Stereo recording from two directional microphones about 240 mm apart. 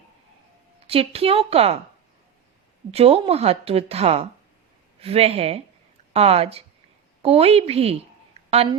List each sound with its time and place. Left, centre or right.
0.9 s a woman's voice: right
2.9 s a woman's voice: right